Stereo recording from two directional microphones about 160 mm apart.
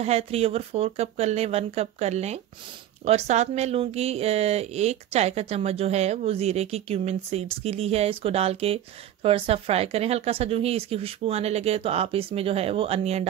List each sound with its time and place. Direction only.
0.0 s speech: 40° right (ahead or behind)